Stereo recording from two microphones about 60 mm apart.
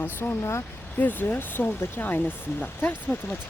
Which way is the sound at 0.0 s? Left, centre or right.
Left.